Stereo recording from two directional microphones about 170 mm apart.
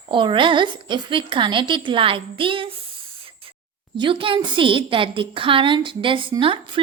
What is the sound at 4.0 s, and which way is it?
A woman's voice, 30° right (ahead or behind).